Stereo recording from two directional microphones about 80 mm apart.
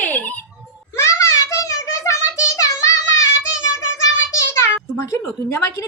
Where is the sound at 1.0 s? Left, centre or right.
Left.